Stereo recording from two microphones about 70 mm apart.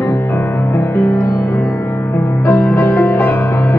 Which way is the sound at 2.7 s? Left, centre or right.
Left.